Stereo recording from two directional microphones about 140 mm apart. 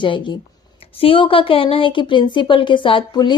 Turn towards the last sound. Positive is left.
turn(degrees=35)  # may be behind; listen again after turning